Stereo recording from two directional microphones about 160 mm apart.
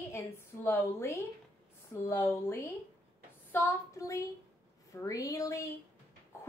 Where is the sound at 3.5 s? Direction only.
20° left (ahead or behind).